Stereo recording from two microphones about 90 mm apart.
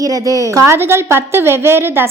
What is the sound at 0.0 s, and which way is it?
A woman's voice, 40° right (ahead or behind).